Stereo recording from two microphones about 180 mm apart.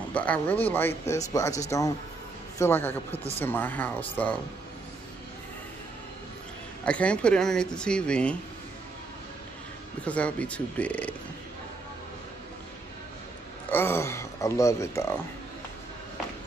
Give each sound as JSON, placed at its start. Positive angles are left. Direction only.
{"t": 0.1, "sound": "speech", "side_deg": 10}
{"t": 6.8, "sound": "speech", "side_deg": 5}
{"t": 10.0, "sound": "speech", "side_deg": 5}
{"t": 13.7, "sound": "speech", "side_deg": 15}